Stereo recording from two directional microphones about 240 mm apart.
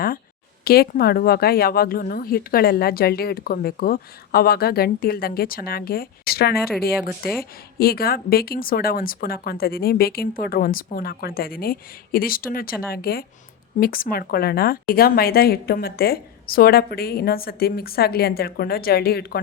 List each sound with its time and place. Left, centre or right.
0.6 s speech: left